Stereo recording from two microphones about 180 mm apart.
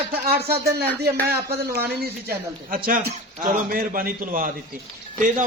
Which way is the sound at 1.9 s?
60° right (ahead or behind).